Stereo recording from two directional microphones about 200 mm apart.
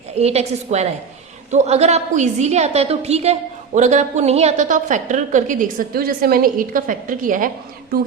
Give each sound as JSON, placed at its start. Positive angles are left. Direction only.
{"t": 0.2, "sound": "a woman's voice", "side_deg": -30}